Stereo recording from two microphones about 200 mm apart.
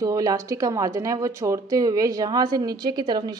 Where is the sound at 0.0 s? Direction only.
20° right (ahead or behind).